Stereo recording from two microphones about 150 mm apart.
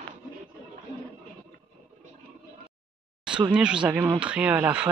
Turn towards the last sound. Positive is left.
turn(degrees=-20)  # may be behind; listen again after turning